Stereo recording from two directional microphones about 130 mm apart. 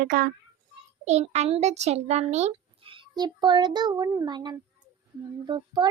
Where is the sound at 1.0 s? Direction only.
60° right (ahead or behind).